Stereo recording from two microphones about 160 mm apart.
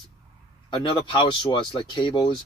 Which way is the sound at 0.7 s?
30° left (ahead or behind).